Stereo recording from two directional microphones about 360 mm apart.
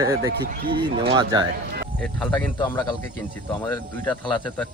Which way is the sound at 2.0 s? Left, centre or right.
Centre.